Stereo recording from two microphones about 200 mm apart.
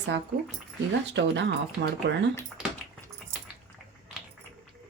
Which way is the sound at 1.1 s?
60° right (ahead or behind).